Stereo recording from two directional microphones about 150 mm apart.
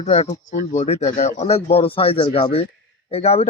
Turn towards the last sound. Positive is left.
turn(degrees=45)  # may be behind; listen again after turning